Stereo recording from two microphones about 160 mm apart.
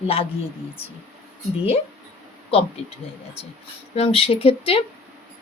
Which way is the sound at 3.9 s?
40° left (ahead or behind).